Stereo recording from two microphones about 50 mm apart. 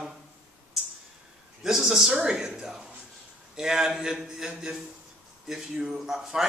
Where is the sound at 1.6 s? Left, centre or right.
Centre.